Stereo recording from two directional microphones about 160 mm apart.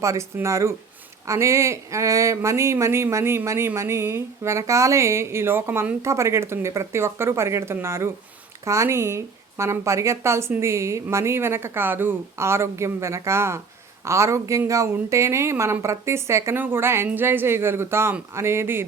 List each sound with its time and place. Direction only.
0.0 s speech: 20° right (ahead or behind)